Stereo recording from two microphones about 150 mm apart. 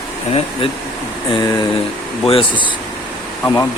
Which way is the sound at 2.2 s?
40° left (ahead or behind).